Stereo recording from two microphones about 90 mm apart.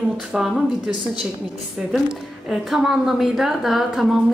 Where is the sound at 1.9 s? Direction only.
5° right (ahead or behind).